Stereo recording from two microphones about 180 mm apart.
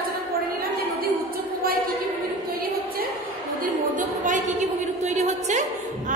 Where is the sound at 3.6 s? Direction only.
45° right (ahead or behind).